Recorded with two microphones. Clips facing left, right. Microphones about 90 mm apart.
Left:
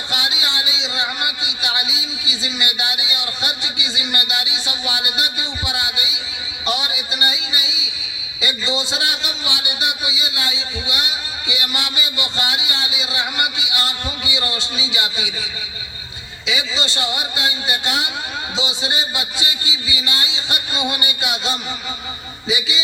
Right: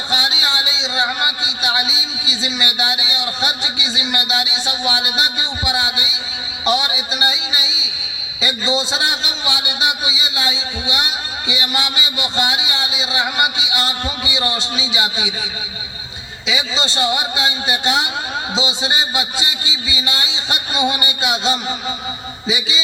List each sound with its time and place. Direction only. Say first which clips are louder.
0.1 s a sound: right 4 dB; 25° right (ahead or behind)
6.7 s a man's voice: right 5 dB; 20° right (ahead or behind)
16.5 s a man's voice: right 2 dB; 20° right (ahead or behind)